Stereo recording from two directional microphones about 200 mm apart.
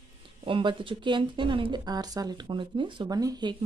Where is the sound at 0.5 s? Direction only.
25° right (ahead or behind).